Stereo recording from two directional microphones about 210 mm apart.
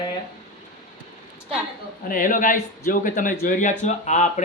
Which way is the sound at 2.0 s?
40° left (ahead or behind).